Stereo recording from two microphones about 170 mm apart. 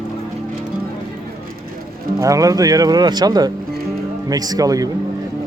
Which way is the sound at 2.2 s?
20° right (ahead or behind).